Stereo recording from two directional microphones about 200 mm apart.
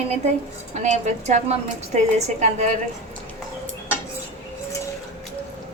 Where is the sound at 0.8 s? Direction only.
35° right (ahead or behind).